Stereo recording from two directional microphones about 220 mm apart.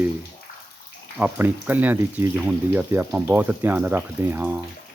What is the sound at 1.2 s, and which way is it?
Speech, 5° right (ahead or behind).